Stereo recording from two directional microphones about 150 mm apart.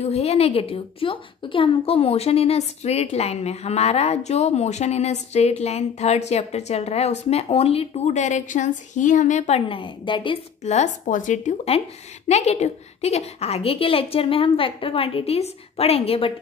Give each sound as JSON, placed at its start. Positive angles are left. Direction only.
{"t": 0.0, "sound": "a woman's voice", "side_deg": 45}
{"t": 9.7, "sound": "a woman's voice", "side_deg": 35}
{"t": 10.6, "sound": "a woman's voice", "side_deg": 50}